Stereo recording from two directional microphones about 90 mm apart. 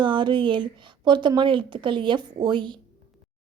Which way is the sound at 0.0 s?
60° right (ahead or behind).